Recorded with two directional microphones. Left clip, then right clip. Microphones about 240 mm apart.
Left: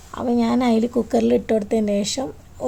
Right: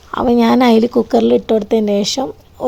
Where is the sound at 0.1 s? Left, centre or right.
Right.